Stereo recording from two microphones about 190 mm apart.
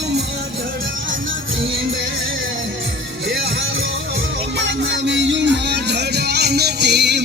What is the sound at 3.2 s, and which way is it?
Music, 60° right (ahead or behind).